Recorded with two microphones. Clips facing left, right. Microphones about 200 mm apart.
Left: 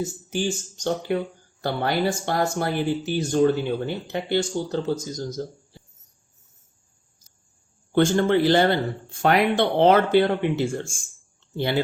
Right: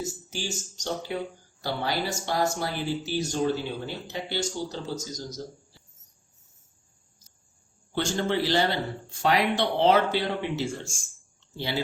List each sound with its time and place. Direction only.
0.0 s speech: 55° left (ahead or behind)
7.9 s speech: 55° left (ahead or behind)